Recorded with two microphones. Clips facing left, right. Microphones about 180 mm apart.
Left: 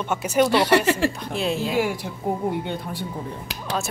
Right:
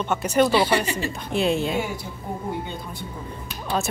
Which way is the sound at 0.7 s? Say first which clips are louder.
Left 5 dB; 80° left.